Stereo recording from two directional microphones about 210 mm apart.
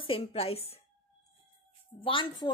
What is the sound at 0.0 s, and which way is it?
Speech, 25° left (ahead or behind).